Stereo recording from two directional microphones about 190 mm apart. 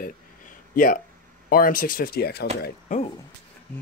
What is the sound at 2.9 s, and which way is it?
Speech, 40° left (ahead or behind).